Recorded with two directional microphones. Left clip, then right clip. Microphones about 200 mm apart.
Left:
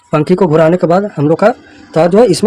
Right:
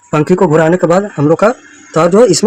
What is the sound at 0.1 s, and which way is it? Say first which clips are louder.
Speech: even; 5° left (ahead or behind).